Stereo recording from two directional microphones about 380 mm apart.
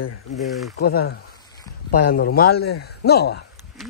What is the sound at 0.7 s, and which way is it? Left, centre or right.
A man's voice, left.